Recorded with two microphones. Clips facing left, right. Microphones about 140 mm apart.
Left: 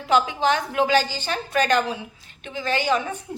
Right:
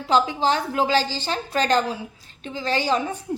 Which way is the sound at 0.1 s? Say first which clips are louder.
Even; 30° right (ahead or behind).